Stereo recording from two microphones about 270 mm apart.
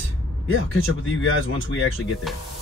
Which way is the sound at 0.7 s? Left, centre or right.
Left.